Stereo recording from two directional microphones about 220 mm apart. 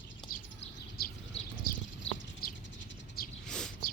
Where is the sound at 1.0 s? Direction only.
45° left (ahead or behind).